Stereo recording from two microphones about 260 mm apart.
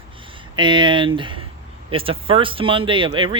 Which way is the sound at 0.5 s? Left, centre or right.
Centre.